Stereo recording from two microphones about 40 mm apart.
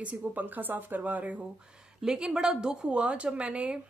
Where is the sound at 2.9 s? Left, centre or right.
Right.